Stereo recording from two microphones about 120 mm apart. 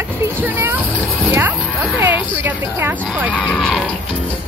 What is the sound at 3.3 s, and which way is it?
Speech, centre (ahead or behind).